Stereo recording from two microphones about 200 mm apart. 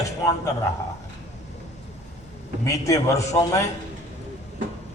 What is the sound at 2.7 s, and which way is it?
Speech, 15° left (ahead or behind).